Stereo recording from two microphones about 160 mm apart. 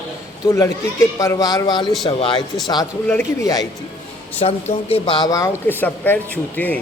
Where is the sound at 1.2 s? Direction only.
20° left (ahead or behind).